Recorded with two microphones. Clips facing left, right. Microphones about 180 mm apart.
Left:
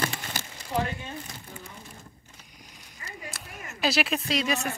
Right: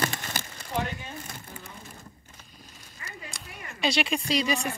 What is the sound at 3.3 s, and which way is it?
Speech, 5° left (ahead or behind).